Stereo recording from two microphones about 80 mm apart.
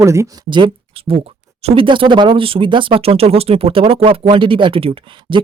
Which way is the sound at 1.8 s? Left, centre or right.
Right.